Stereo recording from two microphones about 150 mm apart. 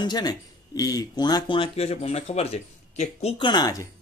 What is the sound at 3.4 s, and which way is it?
Speech, 25° left (ahead or behind).